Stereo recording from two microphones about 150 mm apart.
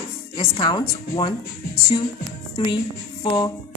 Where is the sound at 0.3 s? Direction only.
35° left (ahead or behind).